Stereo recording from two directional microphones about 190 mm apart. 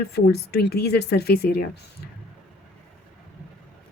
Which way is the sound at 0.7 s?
55° left (ahead or behind).